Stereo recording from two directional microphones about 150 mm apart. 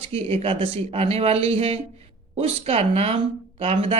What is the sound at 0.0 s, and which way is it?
A woman's voice, 40° right (ahead or behind).